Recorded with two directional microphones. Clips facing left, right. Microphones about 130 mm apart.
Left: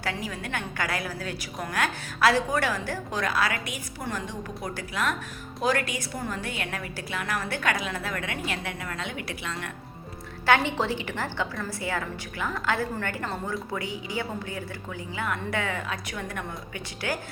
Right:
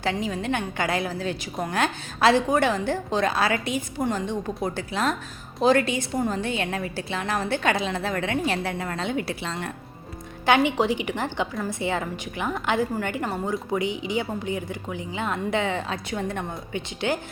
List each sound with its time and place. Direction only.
0.0 s a woman's voice: 25° right (ahead or behind)
10.4 s a woman's voice: 15° right (ahead or behind)